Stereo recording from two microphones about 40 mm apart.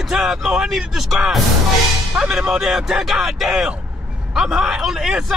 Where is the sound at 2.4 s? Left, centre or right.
Centre.